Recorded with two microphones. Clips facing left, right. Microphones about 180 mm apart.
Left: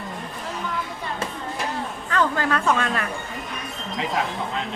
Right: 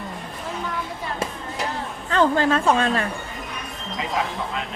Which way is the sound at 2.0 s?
30° right (ahead or behind).